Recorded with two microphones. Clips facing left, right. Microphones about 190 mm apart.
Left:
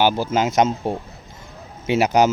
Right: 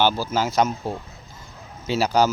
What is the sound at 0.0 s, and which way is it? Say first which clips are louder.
Speech: left 3 dB; 15° left (ahead or behind).